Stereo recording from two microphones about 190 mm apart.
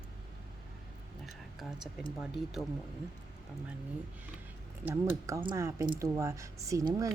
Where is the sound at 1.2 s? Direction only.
Centre (ahead or behind).